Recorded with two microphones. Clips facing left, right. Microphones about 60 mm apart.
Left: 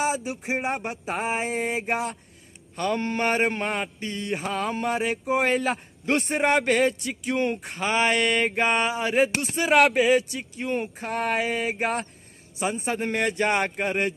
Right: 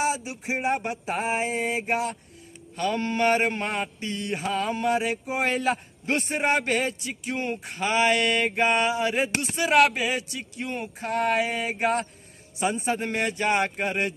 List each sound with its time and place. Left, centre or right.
0.0 s mantra: left